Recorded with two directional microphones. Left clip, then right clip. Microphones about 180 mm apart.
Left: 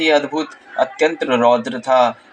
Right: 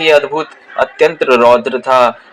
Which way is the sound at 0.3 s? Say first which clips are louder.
Right 5 dB; 15° right (ahead or behind).